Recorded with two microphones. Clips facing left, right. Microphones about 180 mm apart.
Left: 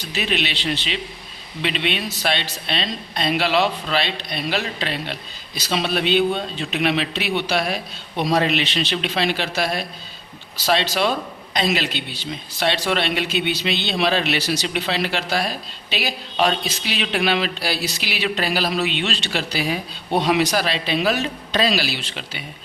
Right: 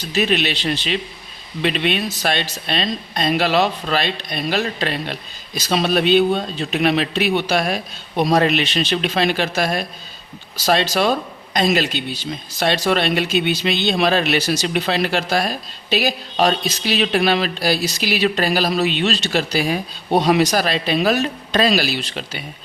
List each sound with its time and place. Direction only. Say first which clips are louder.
0.1 s speech: right 5 dB; 45° right (ahead or behind)